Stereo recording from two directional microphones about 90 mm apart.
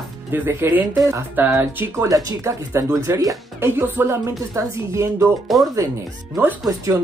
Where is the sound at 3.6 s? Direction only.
25° right (ahead or behind).